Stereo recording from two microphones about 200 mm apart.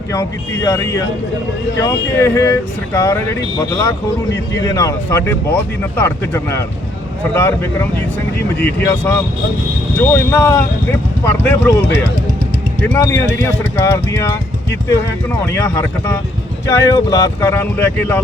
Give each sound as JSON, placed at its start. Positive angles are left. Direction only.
{"t": 0.1, "sound": "speech", "side_deg": 15}
{"t": 8.9, "sound": "speech", "side_deg": 15}
{"t": 12.9, "sound": "speech", "side_deg": 15}
{"t": 15.3, "sound": "speech", "side_deg": 15}